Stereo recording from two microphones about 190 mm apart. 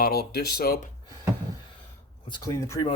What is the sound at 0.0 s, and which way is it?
Speech, 55° left (ahead or behind).